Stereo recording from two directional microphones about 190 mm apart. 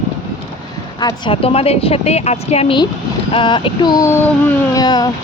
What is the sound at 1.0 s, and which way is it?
A woman's voice, 25° left (ahead or behind).